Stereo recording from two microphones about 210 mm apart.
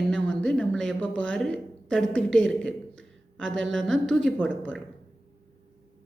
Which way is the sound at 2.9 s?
60° right (ahead or behind).